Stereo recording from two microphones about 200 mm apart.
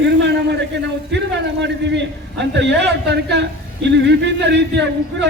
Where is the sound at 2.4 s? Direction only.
60° right (ahead or behind).